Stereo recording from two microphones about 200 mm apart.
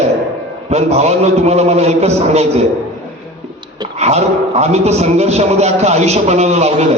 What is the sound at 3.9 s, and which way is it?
A man's voice, 35° right (ahead or behind).